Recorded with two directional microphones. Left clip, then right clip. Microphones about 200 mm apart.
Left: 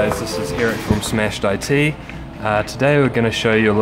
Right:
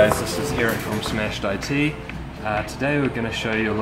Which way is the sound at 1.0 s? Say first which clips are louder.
Left 5 dB; 40° left (ahead or behind).